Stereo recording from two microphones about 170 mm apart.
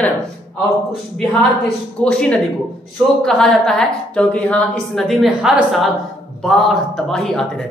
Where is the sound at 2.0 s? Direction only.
5° left (ahead or behind).